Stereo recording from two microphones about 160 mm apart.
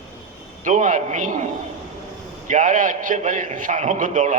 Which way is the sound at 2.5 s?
55° right (ahead or behind).